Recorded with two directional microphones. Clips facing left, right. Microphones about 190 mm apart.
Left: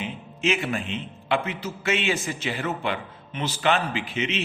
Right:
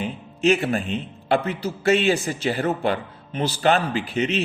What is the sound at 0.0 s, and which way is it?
A man's voice, 35° right (ahead or behind).